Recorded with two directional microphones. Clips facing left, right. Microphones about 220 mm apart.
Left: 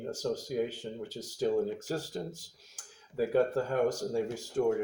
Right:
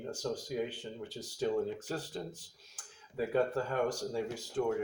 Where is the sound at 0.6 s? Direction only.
40° left (ahead or behind).